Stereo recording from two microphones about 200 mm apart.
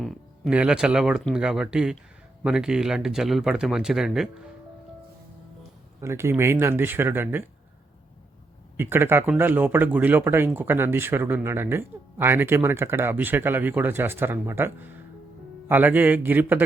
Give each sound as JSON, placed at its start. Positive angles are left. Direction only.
{"t": 0.0, "sound": "speech", "side_deg": 0}
{"t": 6.0, "sound": "speech", "side_deg": -15}
{"t": 8.8, "sound": "speech", "side_deg": -10}